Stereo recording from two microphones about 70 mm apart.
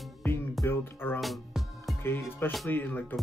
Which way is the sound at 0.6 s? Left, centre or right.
Left.